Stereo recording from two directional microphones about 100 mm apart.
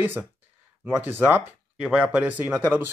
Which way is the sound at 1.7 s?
5° right (ahead or behind).